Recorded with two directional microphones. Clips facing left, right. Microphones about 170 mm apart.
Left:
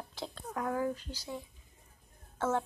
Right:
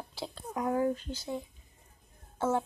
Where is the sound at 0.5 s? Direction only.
15° right (ahead or behind).